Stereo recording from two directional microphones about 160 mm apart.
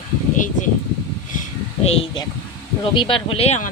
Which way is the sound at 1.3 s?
55° left (ahead or behind).